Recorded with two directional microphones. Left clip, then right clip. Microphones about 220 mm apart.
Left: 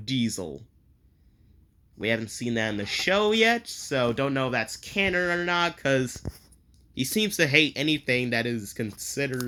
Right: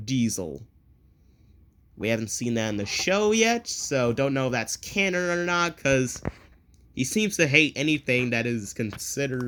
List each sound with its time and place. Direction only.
0.0 s speech: 15° right (ahead or behind)
2.0 s speech: 15° right (ahead or behind)